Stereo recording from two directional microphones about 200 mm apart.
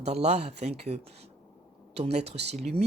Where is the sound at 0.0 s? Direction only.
30° right (ahead or behind).